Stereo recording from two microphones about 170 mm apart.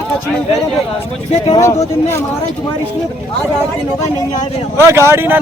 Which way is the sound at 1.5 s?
15° left (ahead or behind).